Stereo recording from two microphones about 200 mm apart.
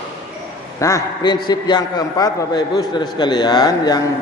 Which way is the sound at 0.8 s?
15° left (ahead or behind).